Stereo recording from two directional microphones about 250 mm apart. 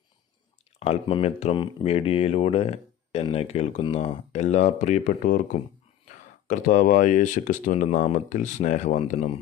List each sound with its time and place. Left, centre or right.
0.7 s speech: left